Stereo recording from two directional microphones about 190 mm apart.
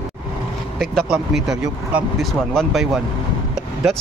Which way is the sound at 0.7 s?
Centre (ahead or behind).